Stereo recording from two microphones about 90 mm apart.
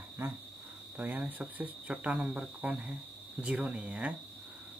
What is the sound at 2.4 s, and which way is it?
Speech, 15° right (ahead or behind).